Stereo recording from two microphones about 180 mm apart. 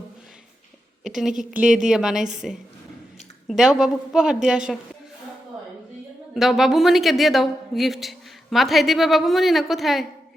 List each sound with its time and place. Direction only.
1.0 s a woman's voice: centre (ahead or behind)
6.3 s a woman's voice: centre (ahead or behind)